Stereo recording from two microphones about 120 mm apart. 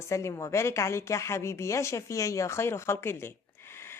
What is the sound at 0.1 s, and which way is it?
Speech, 25° left (ahead or behind).